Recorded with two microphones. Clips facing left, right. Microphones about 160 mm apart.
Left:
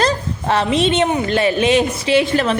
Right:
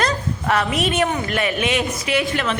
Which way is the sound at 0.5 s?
25° left (ahead or behind).